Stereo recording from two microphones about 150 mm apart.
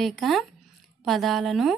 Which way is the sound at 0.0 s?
Centre (ahead or behind).